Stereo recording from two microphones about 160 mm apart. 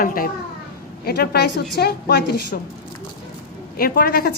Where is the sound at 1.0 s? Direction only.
80° left.